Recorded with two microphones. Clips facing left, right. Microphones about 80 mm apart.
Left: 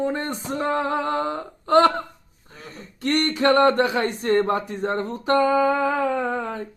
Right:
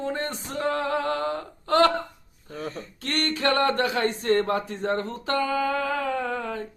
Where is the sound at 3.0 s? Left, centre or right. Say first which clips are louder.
Left 6 dB; left.